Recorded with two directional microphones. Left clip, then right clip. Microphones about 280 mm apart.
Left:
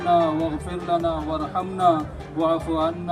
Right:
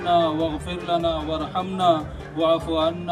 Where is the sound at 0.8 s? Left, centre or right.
Right.